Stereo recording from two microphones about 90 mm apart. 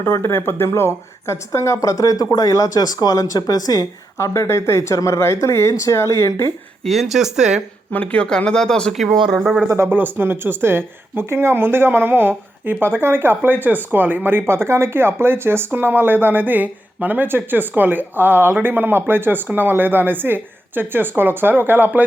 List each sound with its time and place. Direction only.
0.0 s speech: 30° left (ahead or behind)
6.8 s speech: centre (ahead or behind)
7.9 s speech: 15° left (ahead or behind)
9.1 s speech: 55° right (ahead or behind)
9.4 s speech: 10° right (ahead or behind)
9.6 s speech: 30° right (ahead or behind)